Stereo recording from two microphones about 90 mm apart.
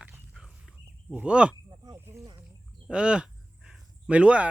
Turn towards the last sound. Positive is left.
turn(degrees=-15)  # may be behind; listen again after turning